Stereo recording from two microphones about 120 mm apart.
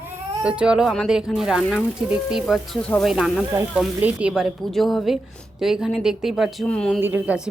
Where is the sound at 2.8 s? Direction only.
10° left (ahead or behind).